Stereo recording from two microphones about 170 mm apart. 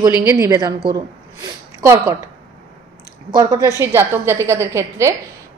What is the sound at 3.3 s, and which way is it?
A woman's voice, 25° right (ahead or behind).